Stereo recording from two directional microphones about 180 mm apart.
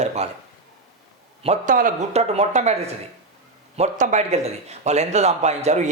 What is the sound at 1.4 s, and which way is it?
A man's voice, 45° right (ahead or behind).